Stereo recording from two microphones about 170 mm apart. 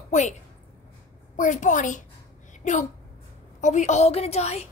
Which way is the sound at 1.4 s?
50° left (ahead or behind).